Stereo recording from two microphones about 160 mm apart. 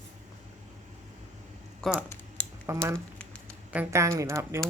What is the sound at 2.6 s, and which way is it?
Speech, 15° right (ahead or behind).